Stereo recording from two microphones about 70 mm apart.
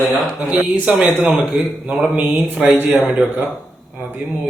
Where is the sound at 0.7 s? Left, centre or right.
Centre.